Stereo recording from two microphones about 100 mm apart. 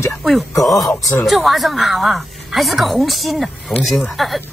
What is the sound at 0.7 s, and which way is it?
Speech, 35° left (ahead or behind).